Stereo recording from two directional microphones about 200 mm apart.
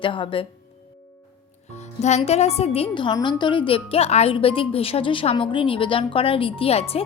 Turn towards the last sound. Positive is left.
turn(degrees=30)  # may be behind; listen again after turning